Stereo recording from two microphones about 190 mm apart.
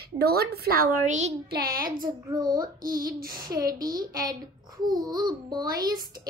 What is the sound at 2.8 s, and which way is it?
Speech, 50° right (ahead or behind).